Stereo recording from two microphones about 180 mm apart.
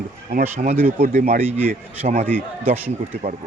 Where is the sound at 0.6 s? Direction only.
35° right (ahead or behind).